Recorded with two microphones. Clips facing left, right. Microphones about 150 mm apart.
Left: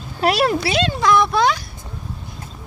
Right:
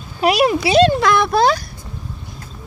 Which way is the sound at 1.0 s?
65° right (ahead or behind).